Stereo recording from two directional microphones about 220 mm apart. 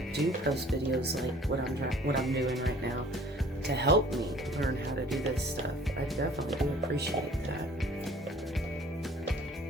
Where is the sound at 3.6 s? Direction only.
50° right (ahead or behind).